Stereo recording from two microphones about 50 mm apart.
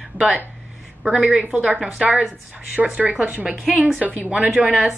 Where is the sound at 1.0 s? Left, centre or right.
Centre.